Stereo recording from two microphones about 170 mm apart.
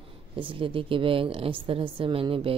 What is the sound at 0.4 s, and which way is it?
A woman's voice, 30° right (ahead or behind).